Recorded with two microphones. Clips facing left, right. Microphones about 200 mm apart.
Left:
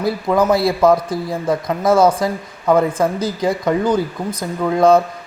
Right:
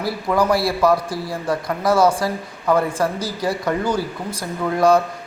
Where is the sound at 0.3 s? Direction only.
20° left (ahead or behind).